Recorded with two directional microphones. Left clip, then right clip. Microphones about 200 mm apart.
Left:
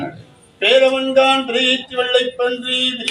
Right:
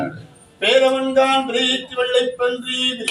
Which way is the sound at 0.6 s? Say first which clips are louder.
Left 2 dB; 20° right (ahead or behind).